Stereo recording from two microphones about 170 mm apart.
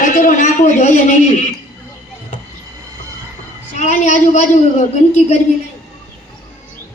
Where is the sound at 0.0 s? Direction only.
50° left (ahead or behind).